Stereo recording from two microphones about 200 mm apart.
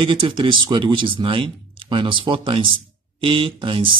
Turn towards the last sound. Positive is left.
turn(degrees=-25)  # may be behind; listen again after turning